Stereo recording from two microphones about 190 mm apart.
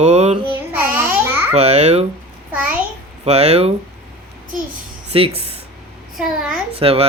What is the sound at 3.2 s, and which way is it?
Speech, 35° right (ahead or behind).